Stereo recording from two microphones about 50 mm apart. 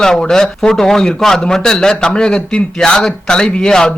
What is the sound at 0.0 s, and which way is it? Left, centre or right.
Speech, centre.